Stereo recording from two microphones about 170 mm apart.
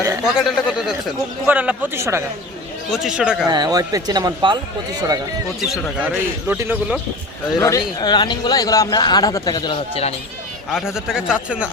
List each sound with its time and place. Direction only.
0.3 s a man's voice: 5° right (ahead or behind)
2.9 s a man's voice: 5° right (ahead or behind)
3.5 s a man's voice: 25° right (ahead or behind)
5.5 s a man's voice: centre (ahead or behind)
7.6 s speech: 20° left (ahead or behind)
10.7 s a man's voice: 5° right (ahead or behind)